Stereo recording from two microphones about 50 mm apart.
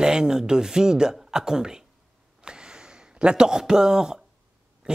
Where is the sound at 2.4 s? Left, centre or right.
Centre.